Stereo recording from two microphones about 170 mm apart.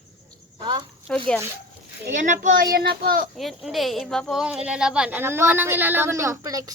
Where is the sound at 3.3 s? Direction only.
Centre (ahead or behind).